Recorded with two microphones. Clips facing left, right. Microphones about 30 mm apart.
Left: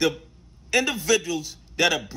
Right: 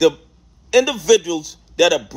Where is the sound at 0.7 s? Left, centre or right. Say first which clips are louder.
Right 8 dB; left.